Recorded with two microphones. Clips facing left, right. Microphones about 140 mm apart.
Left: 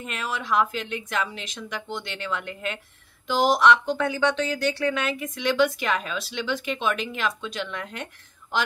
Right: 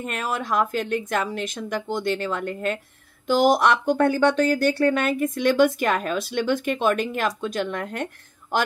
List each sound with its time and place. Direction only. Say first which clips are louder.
0.0 s speech: right 4 dB; 45° right (ahead or behind)